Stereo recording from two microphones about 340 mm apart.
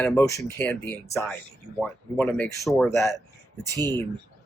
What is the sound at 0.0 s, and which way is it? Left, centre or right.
Speech, centre.